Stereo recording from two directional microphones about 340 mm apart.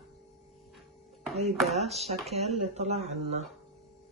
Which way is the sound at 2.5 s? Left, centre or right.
Centre.